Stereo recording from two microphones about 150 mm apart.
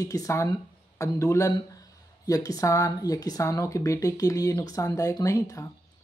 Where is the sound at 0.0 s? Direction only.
25° left (ahead or behind).